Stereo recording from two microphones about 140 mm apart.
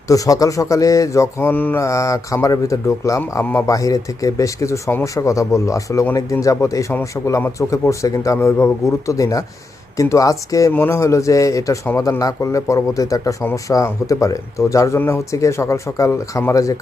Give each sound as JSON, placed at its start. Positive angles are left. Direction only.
{"t": 0.1, "sound": "speech", "side_deg": 25}